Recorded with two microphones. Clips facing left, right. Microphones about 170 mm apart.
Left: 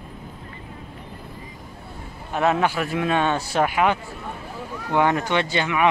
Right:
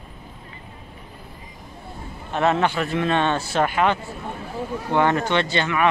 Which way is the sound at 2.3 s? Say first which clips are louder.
Even; 10° left (ahead or behind).